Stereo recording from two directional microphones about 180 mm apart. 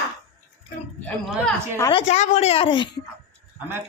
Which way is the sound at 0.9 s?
5° left (ahead or behind).